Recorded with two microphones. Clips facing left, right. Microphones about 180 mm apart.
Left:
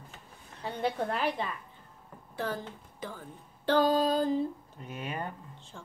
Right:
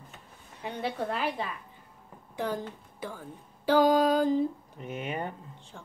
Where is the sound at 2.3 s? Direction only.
15° right (ahead or behind).